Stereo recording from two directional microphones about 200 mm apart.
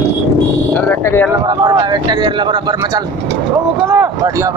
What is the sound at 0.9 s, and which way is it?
Speech, 10° left (ahead or behind).